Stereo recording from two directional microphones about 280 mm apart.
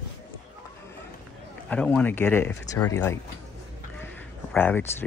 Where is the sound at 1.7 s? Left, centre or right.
Centre.